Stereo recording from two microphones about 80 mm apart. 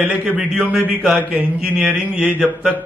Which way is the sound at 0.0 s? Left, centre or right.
Centre.